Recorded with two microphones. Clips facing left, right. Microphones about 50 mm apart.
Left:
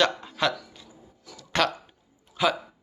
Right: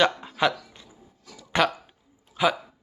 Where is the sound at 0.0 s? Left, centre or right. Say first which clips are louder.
Right 2 dB; centre.